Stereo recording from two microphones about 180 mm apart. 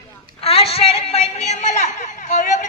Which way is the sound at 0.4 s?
35° left (ahead or behind).